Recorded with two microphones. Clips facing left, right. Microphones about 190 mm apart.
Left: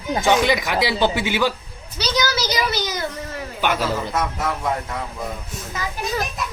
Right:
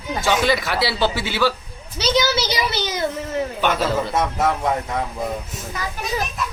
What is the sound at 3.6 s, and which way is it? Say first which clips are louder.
Speech: even; 10° left (ahead or behind).